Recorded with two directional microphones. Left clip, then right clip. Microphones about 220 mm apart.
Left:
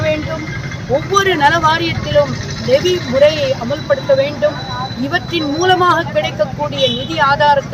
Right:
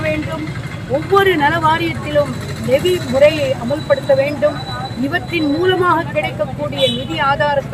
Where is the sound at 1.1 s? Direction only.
Centre (ahead or behind).